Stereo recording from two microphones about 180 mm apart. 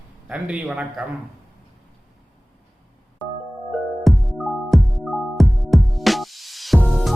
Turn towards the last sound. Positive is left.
turn(degrees=0)  # may be behind; listen again after turning